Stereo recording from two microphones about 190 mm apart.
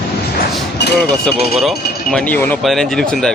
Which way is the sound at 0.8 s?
65° left (ahead or behind).